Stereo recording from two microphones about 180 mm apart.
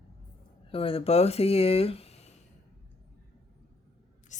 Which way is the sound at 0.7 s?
30° left (ahead or behind).